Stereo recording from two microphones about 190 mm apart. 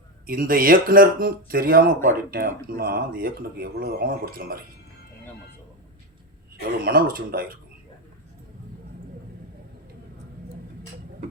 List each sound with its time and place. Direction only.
0.3 s speech: 50° right (ahead or behind)
6.8 s speech: 50° right (ahead or behind)